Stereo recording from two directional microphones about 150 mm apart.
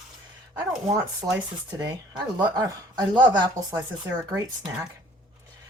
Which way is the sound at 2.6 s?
25° right (ahead or behind).